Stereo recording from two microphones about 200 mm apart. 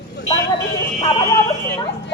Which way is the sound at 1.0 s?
25° left (ahead or behind).